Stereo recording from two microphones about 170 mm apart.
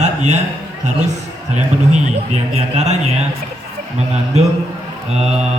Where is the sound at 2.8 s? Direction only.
40° right (ahead or behind).